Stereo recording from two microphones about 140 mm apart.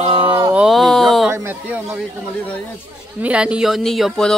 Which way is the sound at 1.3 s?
15° right (ahead or behind).